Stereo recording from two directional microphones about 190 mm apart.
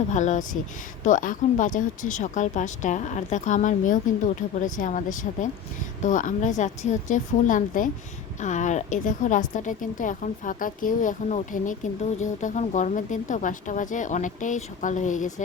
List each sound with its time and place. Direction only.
0.1 s a woman's voice: 40° left (ahead or behind)